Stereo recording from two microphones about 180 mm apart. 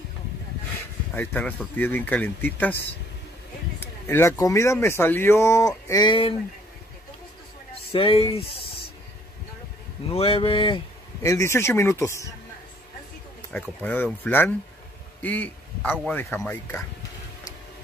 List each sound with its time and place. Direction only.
1.1 s speech: 10° left (ahead or behind)
3.8 s speech: 15° left (ahead or behind)
7.9 s speech: 30° left (ahead or behind)
10.1 s speech: 30° left (ahead or behind)
11.2 s speech: 15° left (ahead or behind)
13.5 s speech: 5° left (ahead or behind)